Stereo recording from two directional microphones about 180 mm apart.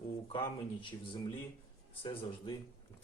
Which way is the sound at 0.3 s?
25° left (ahead or behind).